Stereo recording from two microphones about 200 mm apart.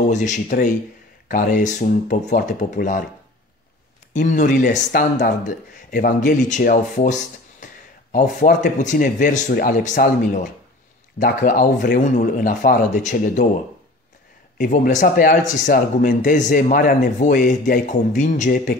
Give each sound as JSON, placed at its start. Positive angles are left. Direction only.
{"t": 0.0, "sound": "speech", "side_deg": 35}
{"t": 4.1, "sound": "speech", "side_deg": 40}
{"t": 14.6, "sound": "speech", "side_deg": 40}